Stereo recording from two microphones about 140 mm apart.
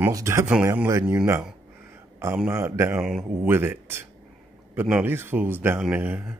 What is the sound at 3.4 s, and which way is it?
Speech, 15° right (ahead or behind).